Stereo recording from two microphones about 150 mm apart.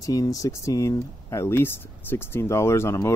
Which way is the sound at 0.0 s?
25° left (ahead or behind).